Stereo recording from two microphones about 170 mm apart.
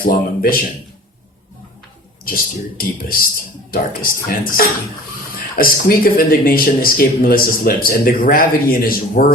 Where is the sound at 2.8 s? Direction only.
60° left (ahead or behind).